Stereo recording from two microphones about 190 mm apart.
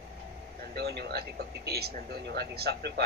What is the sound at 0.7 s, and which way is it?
A man's voice, 60° right (ahead or behind).